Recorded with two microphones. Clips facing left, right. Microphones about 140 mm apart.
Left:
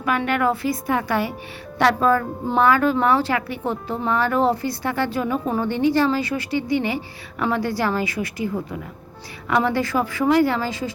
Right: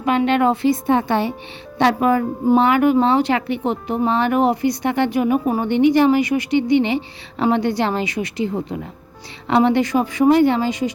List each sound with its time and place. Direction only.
0.0 s speech: 20° right (ahead or behind)